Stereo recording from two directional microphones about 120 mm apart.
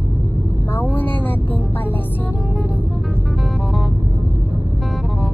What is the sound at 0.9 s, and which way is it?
Vehicle, 15° left (ahead or behind).